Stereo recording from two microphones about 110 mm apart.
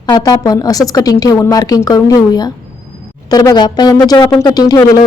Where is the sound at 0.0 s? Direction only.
35° left (ahead or behind).